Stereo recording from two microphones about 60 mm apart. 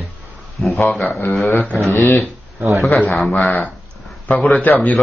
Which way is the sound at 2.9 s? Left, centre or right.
Centre.